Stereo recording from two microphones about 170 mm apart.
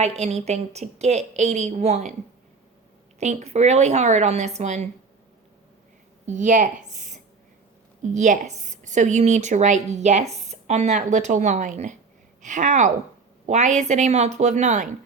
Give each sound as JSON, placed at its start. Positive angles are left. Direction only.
{"t": 0.0, "sound": "a woman's voice", "side_deg": -40}
{"t": 3.2, "sound": "a woman's voice", "side_deg": -40}
{"t": 6.2, "sound": "a woman's voice", "side_deg": -45}
{"t": 6.9, "sound": "a sound", "side_deg": -45}
{"t": 8.0, "sound": "a woman's voice", "side_deg": -45}